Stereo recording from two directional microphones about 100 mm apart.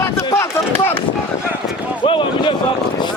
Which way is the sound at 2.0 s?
55° left (ahead or behind).